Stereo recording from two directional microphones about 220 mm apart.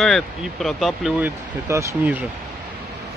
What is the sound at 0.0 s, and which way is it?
Speech, centre (ahead or behind).